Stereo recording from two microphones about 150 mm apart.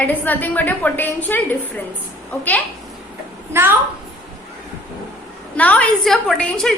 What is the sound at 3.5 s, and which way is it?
Speech, 15° right (ahead or behind).